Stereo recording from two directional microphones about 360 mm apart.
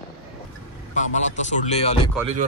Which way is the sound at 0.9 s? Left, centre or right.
Centre.